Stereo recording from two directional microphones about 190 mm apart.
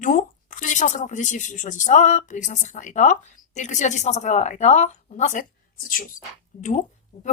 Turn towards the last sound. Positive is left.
turn(degrees=40)  # may be behind; listen again after turning